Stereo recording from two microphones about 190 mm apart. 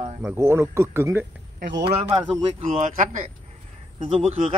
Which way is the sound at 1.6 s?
65° right (ahead or behind).